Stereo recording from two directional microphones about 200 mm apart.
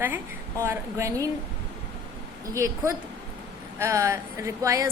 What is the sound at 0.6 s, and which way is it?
Speech, 15° right (ahead or behind).